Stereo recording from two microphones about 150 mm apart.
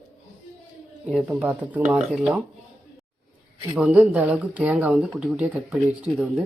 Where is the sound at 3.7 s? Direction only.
10° right (ahead or behind).